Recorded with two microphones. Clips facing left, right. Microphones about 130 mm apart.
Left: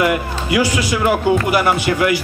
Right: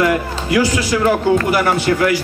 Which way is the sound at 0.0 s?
15° left (ahead or behind).